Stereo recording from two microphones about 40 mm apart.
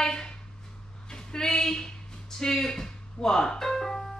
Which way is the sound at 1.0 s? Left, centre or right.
Centre.